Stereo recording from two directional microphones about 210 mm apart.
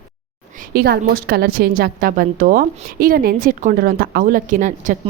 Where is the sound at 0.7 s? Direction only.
45° right (ahead or behind).